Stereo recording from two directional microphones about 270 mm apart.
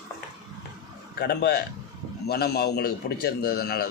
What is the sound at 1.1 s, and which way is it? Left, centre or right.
A man's voice, left.